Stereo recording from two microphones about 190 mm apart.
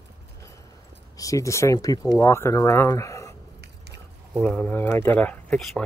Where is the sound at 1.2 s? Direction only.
15° left (ahead or behind).